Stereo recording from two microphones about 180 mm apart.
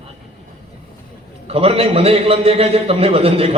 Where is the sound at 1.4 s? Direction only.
35° right (ahead or behind).